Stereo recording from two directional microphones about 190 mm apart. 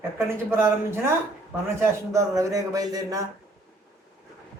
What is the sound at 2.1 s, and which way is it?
A man's voice, 15° right (ahead or behind).